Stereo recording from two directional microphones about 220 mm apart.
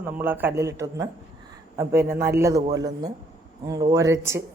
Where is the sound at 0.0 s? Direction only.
10° right (ahead or behind).